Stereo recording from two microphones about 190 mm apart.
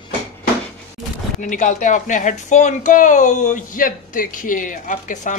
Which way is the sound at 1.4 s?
40° left (ahead or behind).